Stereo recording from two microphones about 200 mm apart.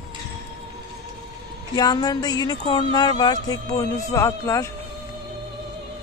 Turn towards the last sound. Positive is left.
turn(degrees=15)  # may be behind; listen again after turning